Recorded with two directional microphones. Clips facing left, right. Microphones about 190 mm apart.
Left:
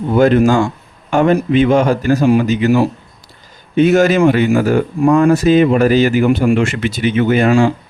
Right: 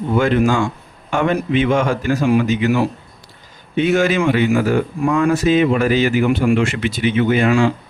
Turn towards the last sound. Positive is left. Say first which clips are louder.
# left 3 dB
turn(degrees=45)  # may be behind; listen again after turning